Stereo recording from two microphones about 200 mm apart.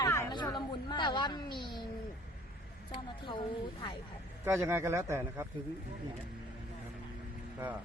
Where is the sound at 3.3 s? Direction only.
25° left (ahead or behind).